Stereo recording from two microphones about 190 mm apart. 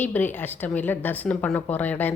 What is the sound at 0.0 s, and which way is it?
Speech, 10° left (ahead or behind).